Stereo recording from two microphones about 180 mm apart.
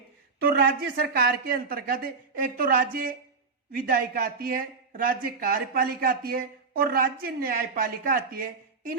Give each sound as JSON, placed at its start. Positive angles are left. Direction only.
{"t": 0.3, "sound": "speech", "side_deg": -55}